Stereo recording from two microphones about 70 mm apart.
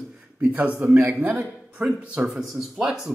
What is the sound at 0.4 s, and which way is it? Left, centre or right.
Speech, centre.